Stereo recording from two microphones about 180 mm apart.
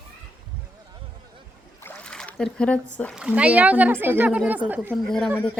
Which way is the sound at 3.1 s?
5° right (ahead or behind).